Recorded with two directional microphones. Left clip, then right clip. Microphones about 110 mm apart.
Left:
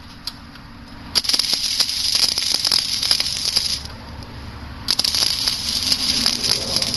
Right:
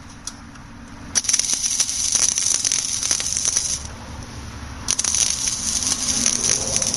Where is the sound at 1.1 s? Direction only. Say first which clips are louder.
Left 3 dB; 5° right (ahead or behind).